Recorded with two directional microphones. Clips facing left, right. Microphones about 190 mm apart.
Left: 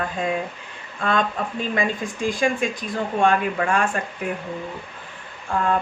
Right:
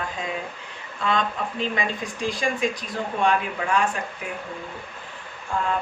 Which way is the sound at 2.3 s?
50° left (ahead or behind).